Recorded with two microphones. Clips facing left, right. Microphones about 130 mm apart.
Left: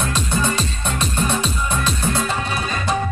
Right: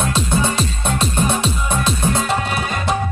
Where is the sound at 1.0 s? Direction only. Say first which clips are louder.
Right 2 dB; 25° right (ahead or behind).